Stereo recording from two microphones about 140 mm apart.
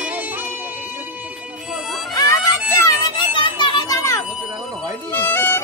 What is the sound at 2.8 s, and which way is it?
Children playing, 25° left (ahead or behind).